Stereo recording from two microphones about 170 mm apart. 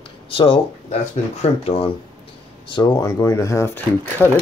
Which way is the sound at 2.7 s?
25° left (ahead or behind).